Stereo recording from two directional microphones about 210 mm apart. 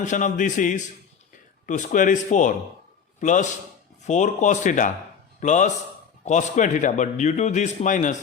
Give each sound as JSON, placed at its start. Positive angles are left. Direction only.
{"t": 0.0, "sound": "a man's voice", "side_deg": 35}